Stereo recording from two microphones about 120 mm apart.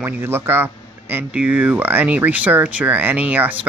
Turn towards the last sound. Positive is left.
turn(degrees=-15)  # may be behind; listen again after turning